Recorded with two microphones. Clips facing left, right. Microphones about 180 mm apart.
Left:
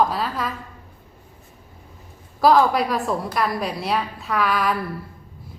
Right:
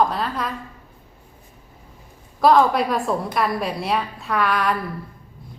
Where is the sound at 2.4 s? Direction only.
Centre (ahead or behind).